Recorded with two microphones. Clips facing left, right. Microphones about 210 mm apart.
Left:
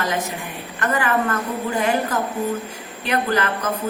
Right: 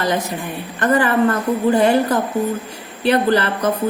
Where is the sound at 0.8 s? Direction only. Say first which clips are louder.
Right 6 dB; 35° right (ahead or behind).